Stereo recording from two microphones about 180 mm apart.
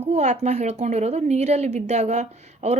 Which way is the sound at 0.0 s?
35° right (ahead or behind).